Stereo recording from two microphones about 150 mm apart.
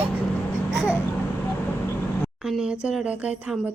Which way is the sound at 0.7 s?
10° right (ahead or behind).